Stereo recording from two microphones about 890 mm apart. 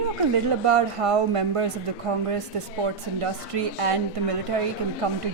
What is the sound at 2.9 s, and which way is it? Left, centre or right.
Speech, right.